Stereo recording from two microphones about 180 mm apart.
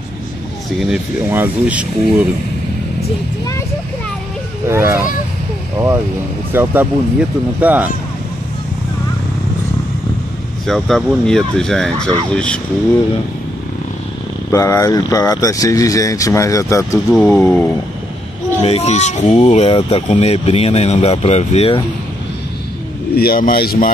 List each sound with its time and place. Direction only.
0.7 s speech: 5° right (ahead or behind)
4.6 s speech: 15° right (ahead or behind)
6.5 s speech: 10° right (ahead or behind)
10.7 s speech: centre (ahead or behind)
14.5 s speech: 15° left (ahead or behind)
18.6 s speech: 35° left (ahead or behind)
23.1 s a man's voice: 55° left (ahead or behind)